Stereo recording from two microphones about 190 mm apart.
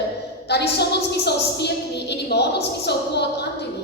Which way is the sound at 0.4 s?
60° left (ahead or behind).